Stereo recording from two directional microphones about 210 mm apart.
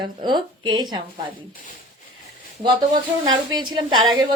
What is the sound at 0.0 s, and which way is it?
A woman's voice, 20° right (ahead or behind).